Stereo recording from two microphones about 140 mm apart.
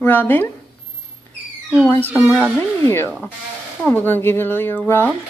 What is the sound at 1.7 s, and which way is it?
A woman's voice, 10° left (ahead or behind).